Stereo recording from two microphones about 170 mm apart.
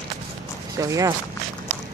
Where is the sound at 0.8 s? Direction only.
20° right (ahead or behind).